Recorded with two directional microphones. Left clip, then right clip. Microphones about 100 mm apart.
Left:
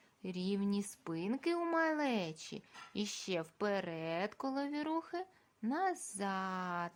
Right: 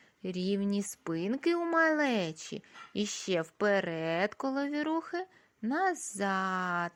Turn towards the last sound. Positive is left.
turn(degrees=-45)  # may be behind; listen again after turning